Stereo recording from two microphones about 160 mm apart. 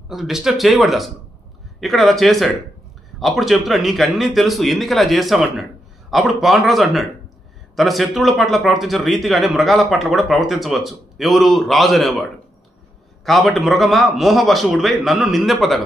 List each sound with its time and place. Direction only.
0.1 s a man's voice: centre (ahead or behind)